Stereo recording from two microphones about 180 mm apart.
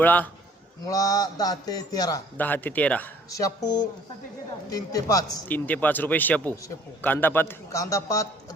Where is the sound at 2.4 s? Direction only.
10° left (ahead or behind).